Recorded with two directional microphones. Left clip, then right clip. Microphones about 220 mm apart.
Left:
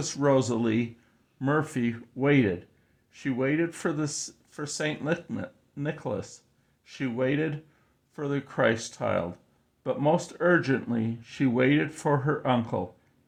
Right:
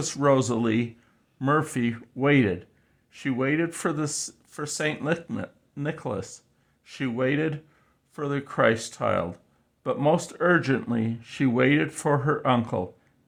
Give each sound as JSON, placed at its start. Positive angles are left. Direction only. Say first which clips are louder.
{"t": 0.0, "sound": "speech", "louder": "right 2 dB", "side_deg": -20}